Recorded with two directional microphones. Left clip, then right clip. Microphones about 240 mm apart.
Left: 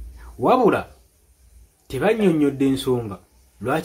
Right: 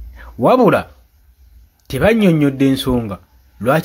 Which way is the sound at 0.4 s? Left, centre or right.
Right.